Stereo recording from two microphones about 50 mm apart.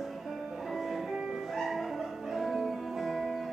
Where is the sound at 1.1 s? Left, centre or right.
Centre.